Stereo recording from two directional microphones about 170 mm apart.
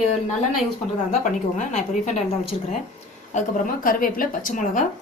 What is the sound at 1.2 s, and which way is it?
Speech, 45° left (ahead or behind).